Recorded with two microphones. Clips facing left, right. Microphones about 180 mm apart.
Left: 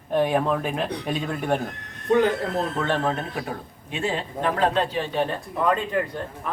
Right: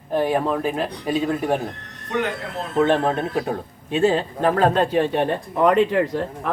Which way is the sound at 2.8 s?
25° right (ahead or behind).